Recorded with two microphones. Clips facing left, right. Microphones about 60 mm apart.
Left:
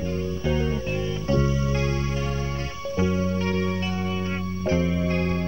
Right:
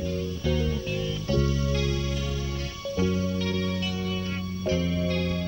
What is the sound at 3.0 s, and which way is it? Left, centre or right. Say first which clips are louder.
Music: left 3 dB; left.